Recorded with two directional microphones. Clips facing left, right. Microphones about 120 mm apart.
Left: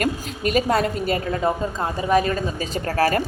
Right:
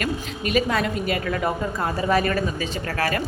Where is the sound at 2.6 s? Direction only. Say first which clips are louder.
Left 4 dB; 40° left (ahead or behind).